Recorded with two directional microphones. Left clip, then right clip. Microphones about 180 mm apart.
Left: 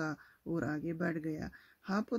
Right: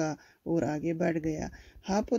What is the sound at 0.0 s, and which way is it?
Speech, 15° right (ahead or behind).